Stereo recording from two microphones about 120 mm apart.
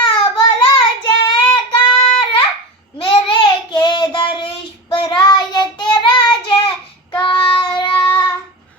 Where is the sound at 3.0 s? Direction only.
45° left (ahead or behind).